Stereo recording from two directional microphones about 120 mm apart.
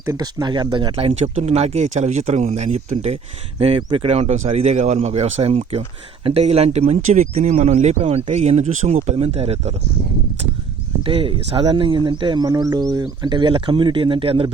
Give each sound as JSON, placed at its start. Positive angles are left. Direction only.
{"t": 0.0, "sound": "speech", "side_deg": -30}
{"t": 3.8, "sound": "speech", "side_deg": -45}
{"t": 11.0, "sound": "speech", "side_deg": -50}